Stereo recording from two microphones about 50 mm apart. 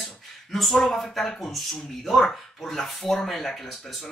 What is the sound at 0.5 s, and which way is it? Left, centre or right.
Speech, centre.